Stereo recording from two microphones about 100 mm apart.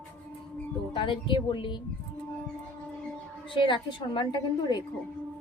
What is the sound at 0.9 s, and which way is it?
Speech, 55° left (ahead or behind).